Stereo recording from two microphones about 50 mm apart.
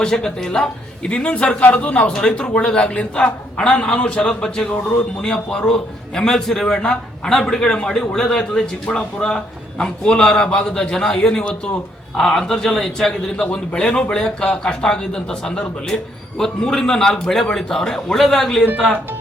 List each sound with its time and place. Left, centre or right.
0.0 s a man's voice: centre